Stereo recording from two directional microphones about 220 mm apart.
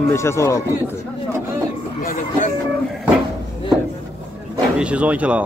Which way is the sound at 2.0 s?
35° left (ahead or behind).